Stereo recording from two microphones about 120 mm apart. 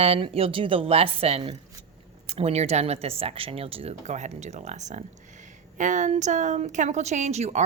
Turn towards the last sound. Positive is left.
turn(degrees=-70)  # may be behind; listen again after turning